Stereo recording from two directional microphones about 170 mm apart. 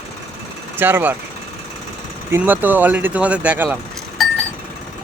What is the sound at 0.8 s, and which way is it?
Speech, 10° right (ahead or behind).